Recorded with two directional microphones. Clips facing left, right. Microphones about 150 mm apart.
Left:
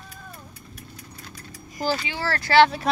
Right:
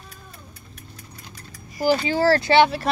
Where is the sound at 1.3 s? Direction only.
15° right (ahead or behind).